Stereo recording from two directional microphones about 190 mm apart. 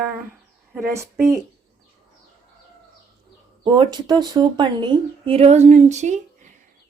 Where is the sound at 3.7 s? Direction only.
25° right (ahead or behind).